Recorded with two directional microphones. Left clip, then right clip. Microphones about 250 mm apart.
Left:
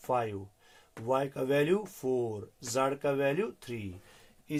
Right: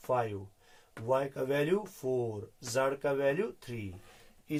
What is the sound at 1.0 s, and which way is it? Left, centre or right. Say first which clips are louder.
Speech: left 1 dB; left.